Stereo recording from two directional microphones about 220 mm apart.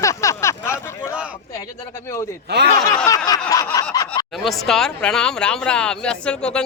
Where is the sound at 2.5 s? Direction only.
50° right (ahead or behind).